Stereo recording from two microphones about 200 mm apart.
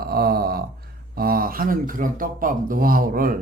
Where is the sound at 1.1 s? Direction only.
50° right (ahead or behind).